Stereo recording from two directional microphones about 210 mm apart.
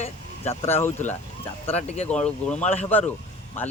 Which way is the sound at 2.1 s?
5° left (ahead or behind).